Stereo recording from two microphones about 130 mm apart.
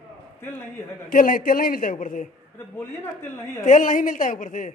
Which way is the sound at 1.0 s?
90° left.